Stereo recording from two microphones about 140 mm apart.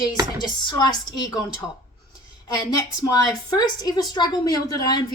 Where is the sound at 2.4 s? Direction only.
25° left (ahead or behind).